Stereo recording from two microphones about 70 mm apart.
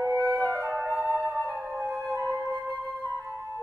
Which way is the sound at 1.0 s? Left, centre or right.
Centre.